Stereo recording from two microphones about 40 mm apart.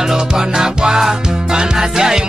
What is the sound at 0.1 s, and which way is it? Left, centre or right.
Music, centre.